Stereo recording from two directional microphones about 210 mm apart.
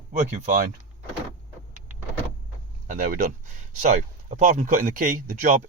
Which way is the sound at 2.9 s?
40° right (ahead or behind).